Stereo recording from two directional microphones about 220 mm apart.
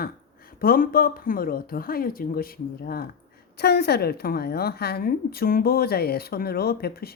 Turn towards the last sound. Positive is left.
turn(degrees=45)  # may be behind; listen again after turning